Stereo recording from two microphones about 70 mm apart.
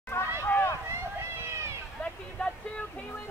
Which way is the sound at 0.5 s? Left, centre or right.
Left.